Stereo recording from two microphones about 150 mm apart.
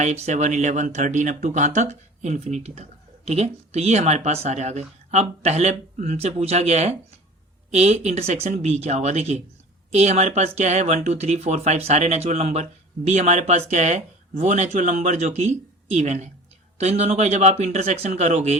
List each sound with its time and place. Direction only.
0.0 s speech: 50° right (ahead or behind)